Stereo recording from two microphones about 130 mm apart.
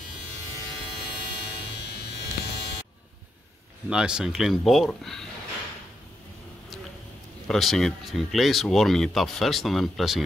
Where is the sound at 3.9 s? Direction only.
5° right (ahead or behind).